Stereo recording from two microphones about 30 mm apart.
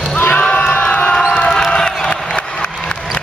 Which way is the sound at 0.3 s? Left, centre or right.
Left.